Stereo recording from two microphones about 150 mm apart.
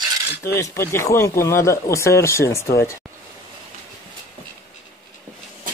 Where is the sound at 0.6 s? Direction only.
20° left (ahead or behind).